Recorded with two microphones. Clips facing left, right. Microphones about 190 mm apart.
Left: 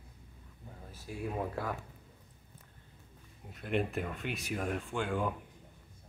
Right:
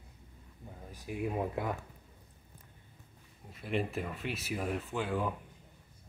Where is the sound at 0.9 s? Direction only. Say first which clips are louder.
Right 2 dB; 15° right (ahead or behind).